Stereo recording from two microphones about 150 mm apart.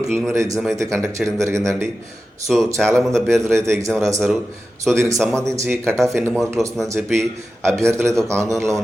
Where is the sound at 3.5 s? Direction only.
20° right (ahead or behind).